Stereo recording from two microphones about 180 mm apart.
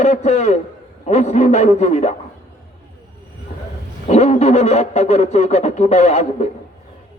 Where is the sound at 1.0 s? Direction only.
35° left (ahead or behind).